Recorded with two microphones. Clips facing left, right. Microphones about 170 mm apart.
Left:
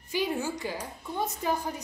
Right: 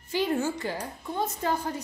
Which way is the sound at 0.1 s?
15° left (ahead or behind).